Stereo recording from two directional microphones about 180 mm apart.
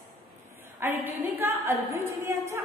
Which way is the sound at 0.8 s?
10° right (ahead or behind).